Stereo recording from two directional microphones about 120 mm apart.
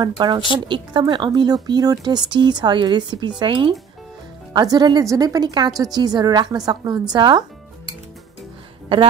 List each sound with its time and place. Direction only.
0.0 s speech: 35° right (ahead or behind)